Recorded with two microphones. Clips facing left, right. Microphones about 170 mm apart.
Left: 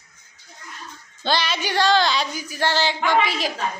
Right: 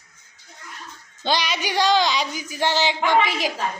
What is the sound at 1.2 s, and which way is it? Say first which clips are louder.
A woman's voice: even; 15° right (ahead or behind).